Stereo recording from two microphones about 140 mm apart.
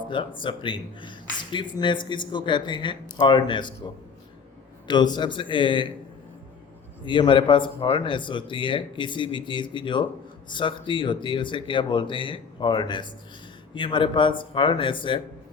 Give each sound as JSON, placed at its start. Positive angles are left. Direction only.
{"t": 0.1, "sound": "speech", "side_deg": 35}
{"t": 4.9, "sound": "speech", "side_deg": 30}
{"t": 7.0, "sound": "speech", "side_deg": 35}